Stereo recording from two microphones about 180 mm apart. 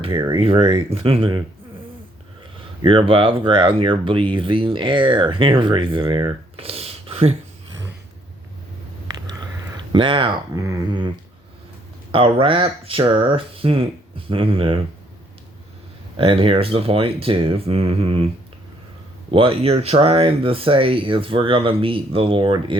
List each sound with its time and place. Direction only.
0.0 s speech: 25° right (ahead or behind)
2.8 s speech: 30° right (ahead or behind)
9.1 s a sound: 20° right (ahead or behind)
9.9 s speech: 25° right (ahead or behind)
12.1 s speech: 30° right (ahead or behind)
16.1 s speech: 30° right (ahead or behind)
19.3 s speech: 30° right (ahead or behind)